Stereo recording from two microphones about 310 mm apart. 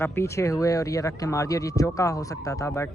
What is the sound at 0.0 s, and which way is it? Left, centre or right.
Speech, centre.